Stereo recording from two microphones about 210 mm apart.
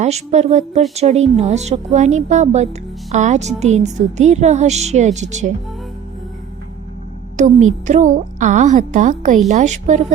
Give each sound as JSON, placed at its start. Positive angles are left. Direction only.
{"t": 0.0, "sound": "a woman's voice", "side_deg": -30}
{"t": 7.3, "sound": "a woman's voice", "side_deg": -35}